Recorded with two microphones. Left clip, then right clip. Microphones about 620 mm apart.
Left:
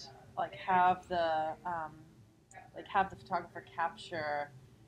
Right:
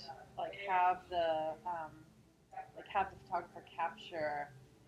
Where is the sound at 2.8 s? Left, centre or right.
Left.